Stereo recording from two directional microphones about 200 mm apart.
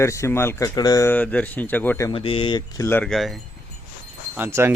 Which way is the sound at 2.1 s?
25° left (ahead or behind).